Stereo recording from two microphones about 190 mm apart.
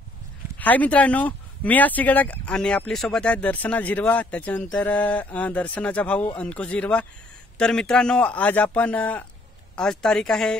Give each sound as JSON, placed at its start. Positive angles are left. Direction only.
{"t": 0.6, "sound": "a woman's voice", "side_deg": 10}